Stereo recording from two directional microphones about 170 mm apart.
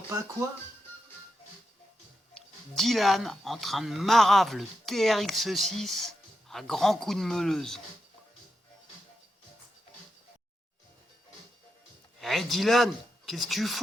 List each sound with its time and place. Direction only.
0.1 s speech: 15° right (ahead or behind)
2.3 s speech: centre (ahead or behind)
12.2 s speech: centre (ahead or behind)